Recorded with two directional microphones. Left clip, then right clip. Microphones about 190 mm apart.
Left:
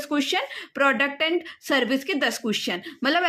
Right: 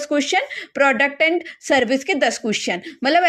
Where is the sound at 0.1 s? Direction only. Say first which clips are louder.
Right 5 dB; 15° right (ahead or behind).